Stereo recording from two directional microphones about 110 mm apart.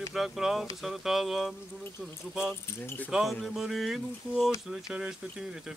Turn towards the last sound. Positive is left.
turn(degrees=-5)  # may be behind; listen again after turning